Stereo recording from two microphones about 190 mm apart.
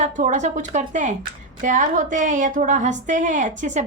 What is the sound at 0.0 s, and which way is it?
A woman's voice, 40° right (ahead or behind).